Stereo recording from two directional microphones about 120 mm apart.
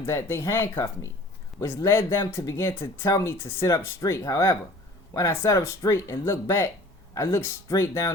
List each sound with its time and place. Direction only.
0.0 s speech: 20° left (ahead or behind)